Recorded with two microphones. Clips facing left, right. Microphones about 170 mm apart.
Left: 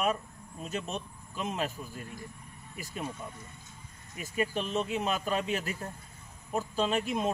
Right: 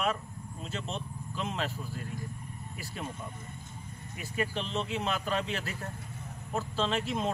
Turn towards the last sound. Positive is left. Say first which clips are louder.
# left 2 dB
turn(degrees=15)  # may be behind; listen again after turning